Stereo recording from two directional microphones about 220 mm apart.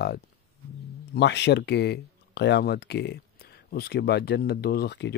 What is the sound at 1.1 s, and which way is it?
Speech, 50° left (ahead or behind).